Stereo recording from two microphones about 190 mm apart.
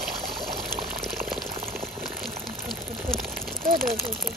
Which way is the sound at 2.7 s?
Centre (ahead or behind).